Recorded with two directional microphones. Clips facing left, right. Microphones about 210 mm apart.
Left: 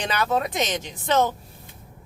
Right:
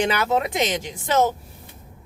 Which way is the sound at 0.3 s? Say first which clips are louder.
Right 2 dB; 20° right (ahead or behind).